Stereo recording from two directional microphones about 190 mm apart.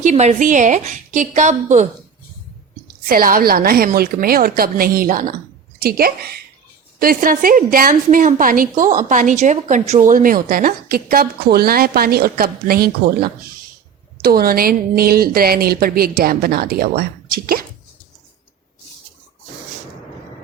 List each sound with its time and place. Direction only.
0.0 s a woman's voice: 35° right (ahead or behind)
2.8 s a woman's voice: 50° right (ahead or behind)